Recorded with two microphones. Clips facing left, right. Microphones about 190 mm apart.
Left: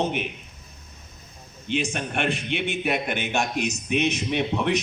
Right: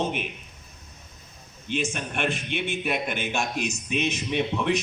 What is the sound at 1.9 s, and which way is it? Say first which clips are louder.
A man's voice: left 2 dB; 55° left (ahead or behind).